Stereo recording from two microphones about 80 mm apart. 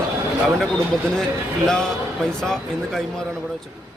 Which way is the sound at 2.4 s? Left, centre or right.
Centre.